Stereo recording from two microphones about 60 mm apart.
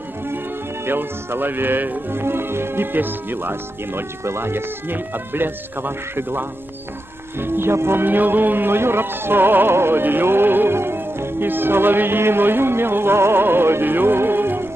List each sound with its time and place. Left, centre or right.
0.8 s speech: right